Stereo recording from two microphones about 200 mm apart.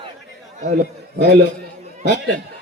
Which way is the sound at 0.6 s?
35° right (ahead or behind).